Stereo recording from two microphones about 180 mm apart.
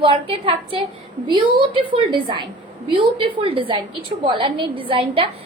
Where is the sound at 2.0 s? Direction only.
25° right (ahead or behind).